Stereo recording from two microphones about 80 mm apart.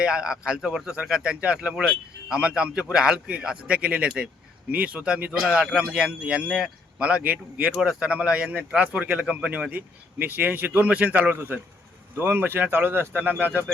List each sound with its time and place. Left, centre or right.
0.0 s speech: centre; by 13.7 s right